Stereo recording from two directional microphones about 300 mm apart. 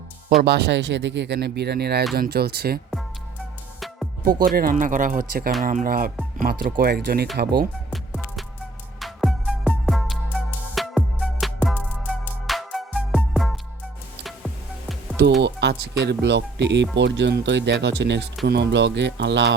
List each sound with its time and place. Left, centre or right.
0.4 s speech: right
3.8 s music: centre
4.4 s speech: right
7.9 s music: centre
15.4 s speech: right